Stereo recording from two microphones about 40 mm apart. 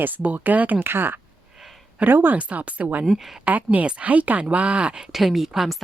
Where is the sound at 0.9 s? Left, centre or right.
Right.